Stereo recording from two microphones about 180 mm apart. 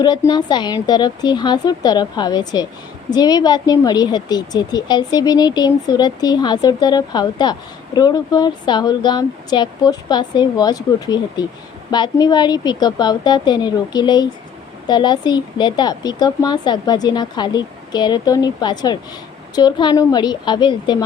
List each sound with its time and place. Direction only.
0.0 s a woman's voice: 25° left (ahead or behind)